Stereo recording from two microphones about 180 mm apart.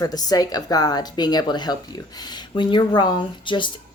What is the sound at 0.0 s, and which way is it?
Speech, 20° left (ahead or behind).